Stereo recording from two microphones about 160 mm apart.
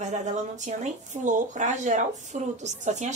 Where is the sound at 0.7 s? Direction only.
50° right (ahead or behind).